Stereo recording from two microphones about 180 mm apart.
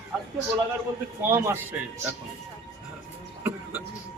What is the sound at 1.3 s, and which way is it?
Speech, 15° right (ahead or behind).